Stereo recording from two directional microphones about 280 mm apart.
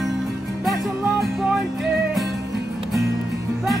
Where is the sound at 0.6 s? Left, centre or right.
Centre.